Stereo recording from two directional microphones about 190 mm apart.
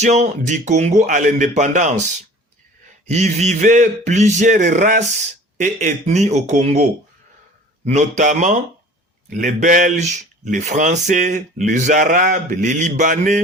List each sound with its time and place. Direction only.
0.0 s speech: 40° right (ahead or behind)
3.1 s speech: 35° right (ahead or behind)
7.9 s speech: 40° right (ahead or behind)